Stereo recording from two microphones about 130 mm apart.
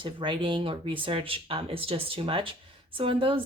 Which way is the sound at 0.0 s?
40° right (ahead or behind).